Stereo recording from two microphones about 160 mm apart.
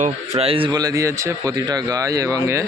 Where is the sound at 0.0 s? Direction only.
40° right (ahead or behind); by 2.4 s 20° right (ahead or behind).